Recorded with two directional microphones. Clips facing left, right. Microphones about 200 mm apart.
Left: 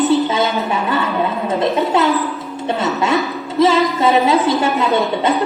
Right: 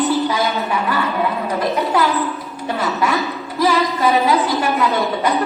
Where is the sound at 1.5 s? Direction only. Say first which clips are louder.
Left 3 dB; 25° left (ahead or behind).